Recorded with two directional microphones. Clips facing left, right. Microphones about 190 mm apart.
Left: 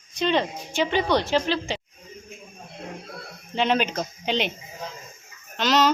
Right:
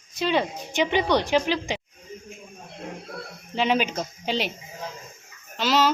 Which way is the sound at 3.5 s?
5° right (ahead or behind).